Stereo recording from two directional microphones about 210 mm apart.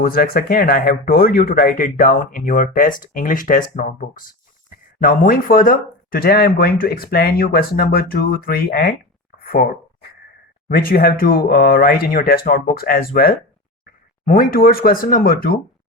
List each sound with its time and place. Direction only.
0.0 s speech: 45° left (ahead or behind)
9.5 s a sound: 40° left (ahead or behind)
10.7 s speech: 45° left (ahead or behind)